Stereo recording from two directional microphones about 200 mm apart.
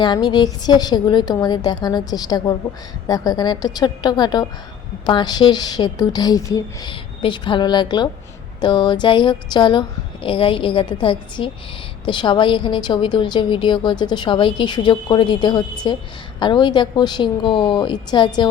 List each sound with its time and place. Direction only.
0.0 s a woman's voice: 20° left (ahead or behind)